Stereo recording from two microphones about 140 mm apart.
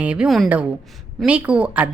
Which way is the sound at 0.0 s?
10° right (ahead or behind).